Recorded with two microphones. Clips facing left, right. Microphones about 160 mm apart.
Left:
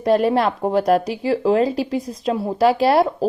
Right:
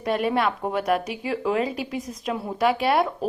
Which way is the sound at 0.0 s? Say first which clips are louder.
Left 6 dB; 40° left (ahead or behind).